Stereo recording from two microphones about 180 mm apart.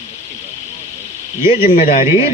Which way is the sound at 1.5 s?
30° left (ahead or behind).